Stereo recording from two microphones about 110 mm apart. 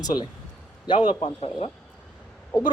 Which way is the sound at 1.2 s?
60° left (ahead or behind).